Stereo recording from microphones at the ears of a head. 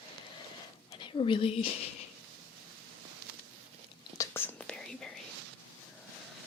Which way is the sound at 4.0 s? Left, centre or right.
Left.